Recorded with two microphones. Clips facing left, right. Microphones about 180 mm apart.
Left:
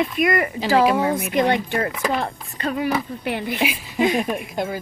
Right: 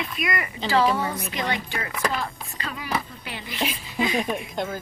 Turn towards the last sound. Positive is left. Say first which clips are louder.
# left 3 dB
turn(degrees=5)  # may be behind; listen again after turning